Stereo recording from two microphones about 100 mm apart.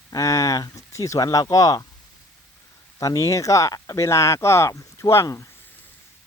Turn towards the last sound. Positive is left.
turn(degrees=30)  # may be behind; listen again after turning